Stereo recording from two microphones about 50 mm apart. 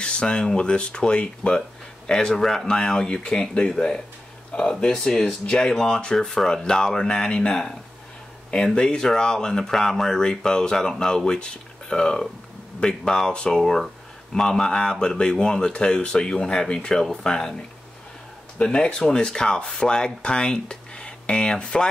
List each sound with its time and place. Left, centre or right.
0.0 s speech: centre
8.7 s speech: centre